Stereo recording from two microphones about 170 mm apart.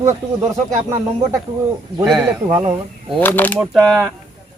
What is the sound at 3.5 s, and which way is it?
Speech, centre (ahead or behind).